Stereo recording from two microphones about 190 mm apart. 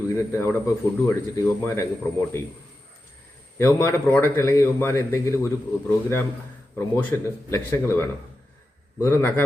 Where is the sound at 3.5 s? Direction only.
15° left (ahead or behind).